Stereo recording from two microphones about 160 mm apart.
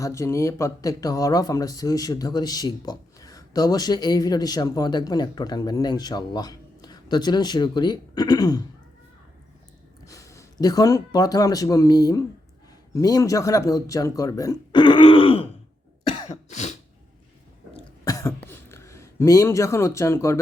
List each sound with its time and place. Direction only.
0.0 s speech: 20° left (ahead or behind)
10.1 s speech: 20° left (ahead or behind)
16.0 s cough: 45° left (ahead or behind)
18.0 s throat clearing: 20° left (ahead or behind)